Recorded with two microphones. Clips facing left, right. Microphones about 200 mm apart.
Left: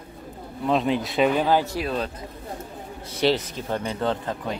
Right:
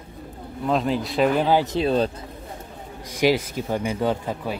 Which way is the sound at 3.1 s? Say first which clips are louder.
Right 2 dB; 10° right (ahead or behind).